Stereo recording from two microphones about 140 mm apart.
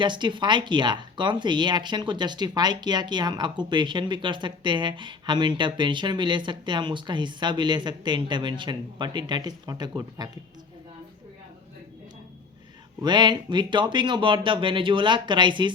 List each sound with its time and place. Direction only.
0.0 s speech: 35° right (ahead or behind)
13.0 s speech: 30° right (ahead or behind)